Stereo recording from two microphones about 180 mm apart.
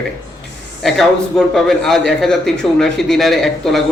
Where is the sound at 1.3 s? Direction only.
Centre (ahead or behind).